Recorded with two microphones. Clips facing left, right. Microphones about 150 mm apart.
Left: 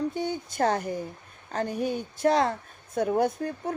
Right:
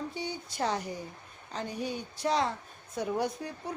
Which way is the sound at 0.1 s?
50° left (ahead or behind).